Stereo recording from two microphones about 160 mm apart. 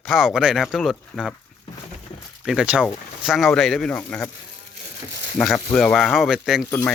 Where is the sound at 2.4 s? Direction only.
5° right (ahead or behind).